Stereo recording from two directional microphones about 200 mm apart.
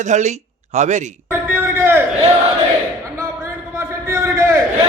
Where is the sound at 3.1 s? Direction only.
15° right (ahead or behind).